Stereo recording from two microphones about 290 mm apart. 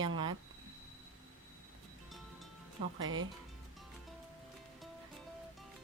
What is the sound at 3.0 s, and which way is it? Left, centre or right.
Speech, right.